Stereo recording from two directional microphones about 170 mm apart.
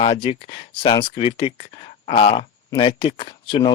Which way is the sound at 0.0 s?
30° left (ahead or behind).